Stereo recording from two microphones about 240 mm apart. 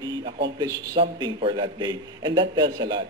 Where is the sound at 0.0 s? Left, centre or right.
Centre.